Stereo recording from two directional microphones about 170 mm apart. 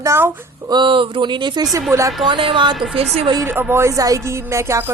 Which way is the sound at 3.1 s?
30° right (ahead or behind).